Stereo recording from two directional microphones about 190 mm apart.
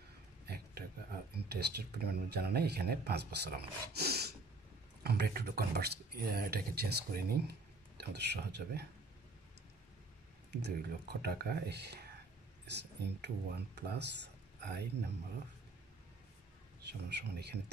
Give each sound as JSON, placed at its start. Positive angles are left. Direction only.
{"t": 0.5, "sound": "speech", "side_deg": -55}
{"t": 10.6, "sound": "speech", "side_deg": -55}
{"t": 13.0, "sound": "speech", "side_deg": -60}
{"t": 16.8, "sound": "speech", "side_deg": -60}